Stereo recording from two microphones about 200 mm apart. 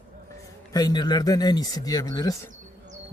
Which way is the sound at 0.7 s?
20° left (ahead or behind).